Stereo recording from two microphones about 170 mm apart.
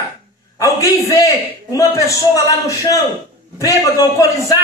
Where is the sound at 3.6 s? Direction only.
20° left (ahead or behind).